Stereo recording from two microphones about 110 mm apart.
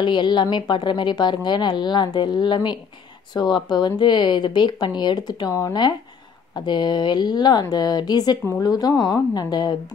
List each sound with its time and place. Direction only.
0.0 s a woman's voice: 45° left (ahead or behind)